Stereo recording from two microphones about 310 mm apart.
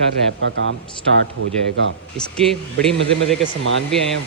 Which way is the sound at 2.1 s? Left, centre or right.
Centre.